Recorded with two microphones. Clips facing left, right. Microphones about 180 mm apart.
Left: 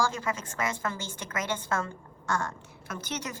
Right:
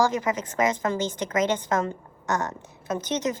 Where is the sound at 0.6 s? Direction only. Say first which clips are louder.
Right 11 dB; 20° right (ahead or behind).